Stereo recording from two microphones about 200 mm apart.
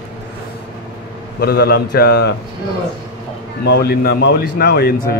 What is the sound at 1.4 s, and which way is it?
Speech, 55° left (ahead or behind).